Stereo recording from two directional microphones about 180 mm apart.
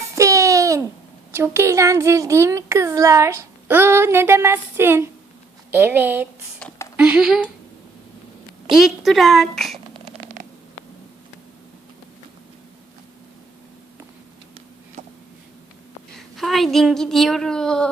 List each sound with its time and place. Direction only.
0.2 s a sound: 20° right (ahead or behind)
1.3 s speech: 15° right (ahead or behind)
6.6 s a sound: 10° left (ahead or behind)
6.9 s speech: 10° right (ahead or behind)
8.7 s speech: centre (ahead or behind)
16.1 s a woman's voice: centre (ahead or behind)